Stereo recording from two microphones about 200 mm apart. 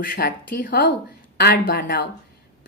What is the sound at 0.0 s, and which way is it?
A woman's voice, 45° left (ahead or behind).